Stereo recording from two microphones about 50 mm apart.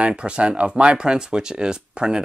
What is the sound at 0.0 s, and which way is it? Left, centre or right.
Speech, right.